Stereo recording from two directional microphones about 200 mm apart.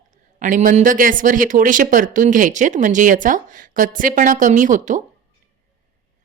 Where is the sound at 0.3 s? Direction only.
40° right (ahead or behind).